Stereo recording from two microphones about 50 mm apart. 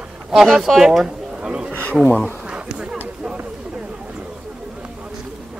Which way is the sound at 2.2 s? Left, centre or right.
Right.